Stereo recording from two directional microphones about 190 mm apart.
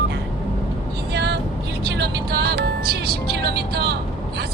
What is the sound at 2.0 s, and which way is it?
Music, 60° right (ahead or behind).